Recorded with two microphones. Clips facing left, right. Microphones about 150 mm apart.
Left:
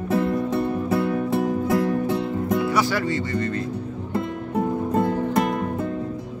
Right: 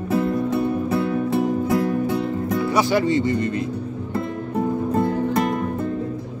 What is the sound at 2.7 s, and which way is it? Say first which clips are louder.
Speech: right 3 dB; 20° right (ahead or behind).